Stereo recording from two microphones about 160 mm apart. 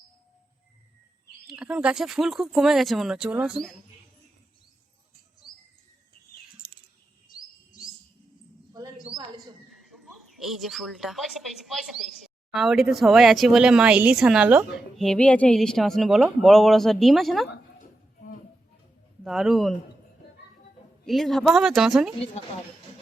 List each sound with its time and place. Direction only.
1.5 s speech: 5° right (ahead or behind)
9.7 s a woman's voice: centre (ahead or behind)
17.7 s a sound: 60° left (ahead or behind)
19.2 s speech: centre (ahead or behind)
21.0 s speech: centre (ahead or behind)